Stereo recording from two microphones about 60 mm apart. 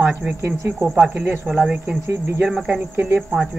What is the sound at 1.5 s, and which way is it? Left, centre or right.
Speech, centre.